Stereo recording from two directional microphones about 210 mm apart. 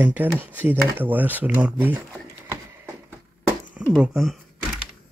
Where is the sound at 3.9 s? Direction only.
Centre (ahead or behind).